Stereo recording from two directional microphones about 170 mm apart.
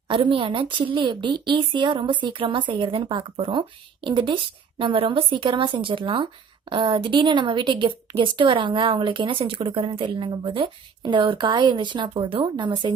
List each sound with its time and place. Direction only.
0.1 s a woman's voice: 30° right (ahead or behind)